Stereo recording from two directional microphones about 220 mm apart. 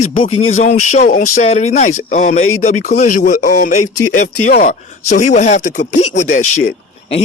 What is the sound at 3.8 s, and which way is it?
Speech, 90° left.